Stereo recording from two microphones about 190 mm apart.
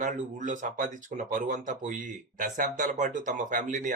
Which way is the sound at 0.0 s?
40° right (ahead or behind).